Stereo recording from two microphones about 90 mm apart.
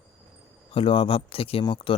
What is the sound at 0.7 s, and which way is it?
Speech, 90° left.